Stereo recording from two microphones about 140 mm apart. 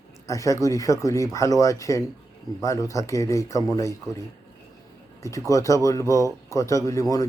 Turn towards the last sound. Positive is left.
turn(degrees=25)  # may be behind; listen again after turning